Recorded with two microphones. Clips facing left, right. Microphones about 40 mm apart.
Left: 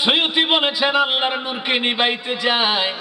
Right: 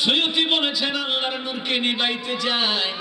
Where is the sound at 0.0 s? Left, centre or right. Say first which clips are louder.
Left 3 dB; left.